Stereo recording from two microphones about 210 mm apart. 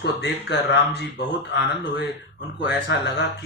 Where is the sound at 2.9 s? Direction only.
55° left (ahead or behind).